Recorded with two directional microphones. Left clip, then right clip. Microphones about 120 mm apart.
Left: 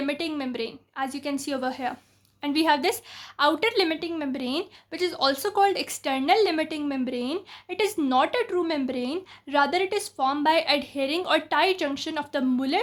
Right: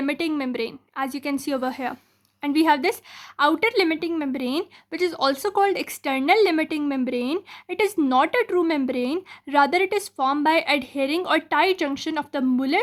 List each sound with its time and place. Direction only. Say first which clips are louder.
0.0 s a woman's voice: right 4 dB; 40° right (ahead or behind)